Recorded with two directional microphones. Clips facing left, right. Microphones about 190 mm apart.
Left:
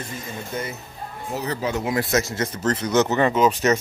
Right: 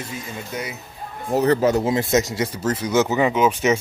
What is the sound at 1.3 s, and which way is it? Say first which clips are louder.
Speech: right 9 dB; 50° right (ahead or behind).